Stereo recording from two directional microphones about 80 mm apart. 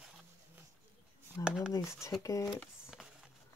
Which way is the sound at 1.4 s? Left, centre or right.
Left.